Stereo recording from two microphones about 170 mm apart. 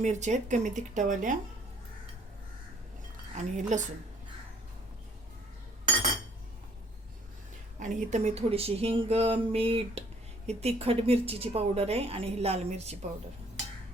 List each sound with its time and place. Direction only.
0.0 s speech: 45° right (ahead or behind)
3.3 s speech: 45° right (ahead or behind)
7.8 s a woman's voice: 45° right (ahead or behind)